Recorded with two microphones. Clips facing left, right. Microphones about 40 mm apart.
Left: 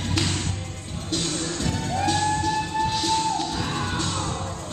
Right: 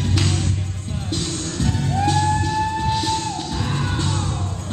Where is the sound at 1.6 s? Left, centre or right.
Centre.